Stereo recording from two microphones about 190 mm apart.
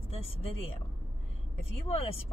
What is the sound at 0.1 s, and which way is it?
Vehicle, 30° left (ahead or behind).